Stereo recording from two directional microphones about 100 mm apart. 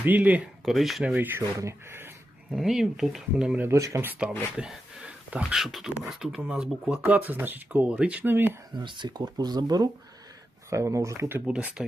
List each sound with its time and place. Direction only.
0.0 s speech: 15° right (ahead or behind)
0.6 s speech: centre (ahead or behind)
1.0 s speech: 15° right (ahead or behind)
1.5 s speech: 25° right (ahead or behind)
2.5 s speech: 5° right (ahead or behind)
3.7 s speech: 30° right (ahead or behind)
4.1 s speech: 10° right (ahead or behind)
8.8 s speech: 50° right (ahead or behind)
10.7 s speech: 30° right (ahead or behind)
11.4 s speech: 10° right (ahead or behind)